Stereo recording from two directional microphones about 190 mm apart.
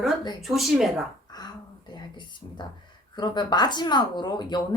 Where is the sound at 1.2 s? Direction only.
20° left (ahead or behind).